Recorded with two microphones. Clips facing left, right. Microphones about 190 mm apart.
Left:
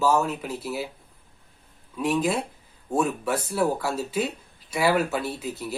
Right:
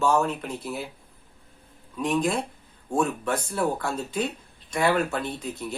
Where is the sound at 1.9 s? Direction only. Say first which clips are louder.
Left 1 dB; 5° left (ahead or behind).